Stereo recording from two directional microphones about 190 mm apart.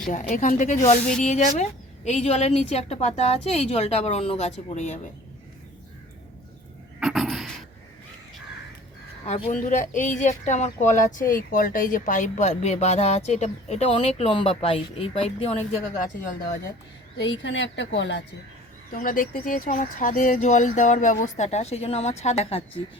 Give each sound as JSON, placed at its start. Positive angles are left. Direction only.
{"t": 0.1, "sound": "speech", "side_deg": 40}
{"t": 7.0, "sound": "a sound", "side_deg": 0}
{"t": 9.5, "sound": "speech", "side_deg": 40}
{"t": 16.2, "sound": "speech", "side_deg": 50}
{"t": 17.2, "sound": "a woman's voice", "side_deg": 70}
{"t": 18.9, "sound": "speech", "side_deg": 45}